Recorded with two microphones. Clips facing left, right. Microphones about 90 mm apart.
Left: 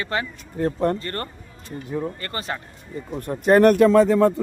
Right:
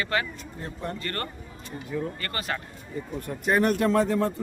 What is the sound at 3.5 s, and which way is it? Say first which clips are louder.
Speech: left 9 dB; 65° left (ahead or behind).